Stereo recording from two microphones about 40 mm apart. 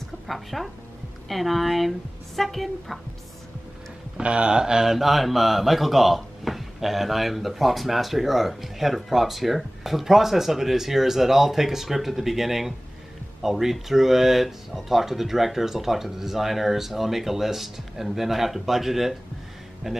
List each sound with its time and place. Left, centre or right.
0.3 s speech: centre
4.2 s speech: right
4.9 s speech: centre